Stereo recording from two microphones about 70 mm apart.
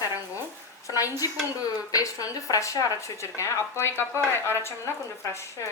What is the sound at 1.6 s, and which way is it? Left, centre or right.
A woman's voice, left.